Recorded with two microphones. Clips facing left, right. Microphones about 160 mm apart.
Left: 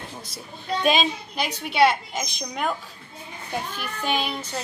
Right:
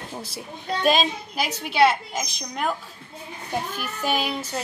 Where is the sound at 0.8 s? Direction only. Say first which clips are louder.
Right 1 dB; centre (ahead or behind).